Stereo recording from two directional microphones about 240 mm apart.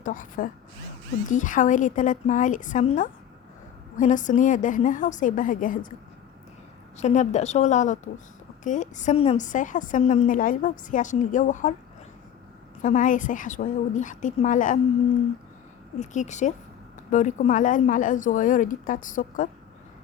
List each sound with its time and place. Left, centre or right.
0.0 s a woman's voice: left
7.0 s a woman's voice: left
12.8 s a woman's voice: left
16.0 s a woman's voice: left